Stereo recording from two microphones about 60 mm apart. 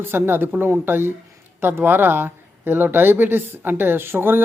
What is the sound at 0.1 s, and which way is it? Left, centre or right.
A man's voice, right.